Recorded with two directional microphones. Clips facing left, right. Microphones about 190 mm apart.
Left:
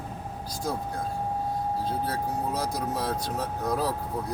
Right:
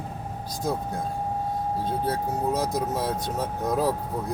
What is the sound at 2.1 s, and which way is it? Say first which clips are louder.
Speech: right 3 dB; 20° right (ahead or behind).